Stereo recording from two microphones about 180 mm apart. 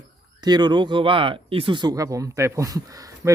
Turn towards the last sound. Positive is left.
turn(degrees=-20)  # may be behind; listen again after turning